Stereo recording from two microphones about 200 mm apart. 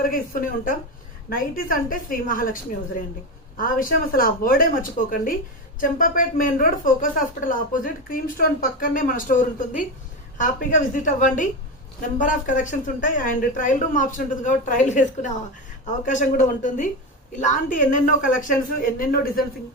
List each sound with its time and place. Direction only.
0.0 s a woman's voice: 45° left (ahead or behind)